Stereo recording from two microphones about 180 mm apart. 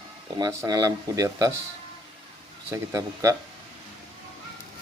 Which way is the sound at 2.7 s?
15° right (ahead or behind).